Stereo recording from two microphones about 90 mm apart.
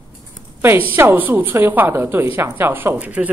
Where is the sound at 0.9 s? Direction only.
20° right (ahead or behind).